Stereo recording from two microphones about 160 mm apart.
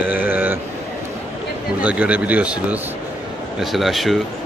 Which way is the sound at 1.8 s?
10° right (ahead or behind).